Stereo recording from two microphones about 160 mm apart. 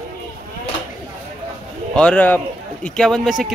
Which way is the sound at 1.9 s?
10° left (ahead or behind).